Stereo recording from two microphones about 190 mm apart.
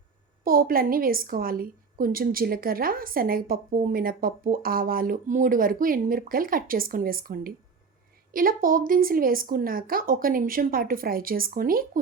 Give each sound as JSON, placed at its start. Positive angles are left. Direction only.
{"t": 0.4, "sound": "a woman's voice", "side_deg": -50}